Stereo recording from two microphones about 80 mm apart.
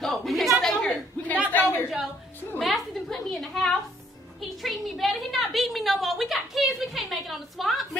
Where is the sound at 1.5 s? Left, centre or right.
Left.